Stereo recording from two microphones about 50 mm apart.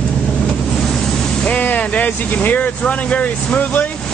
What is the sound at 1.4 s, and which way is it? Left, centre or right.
Speech, left.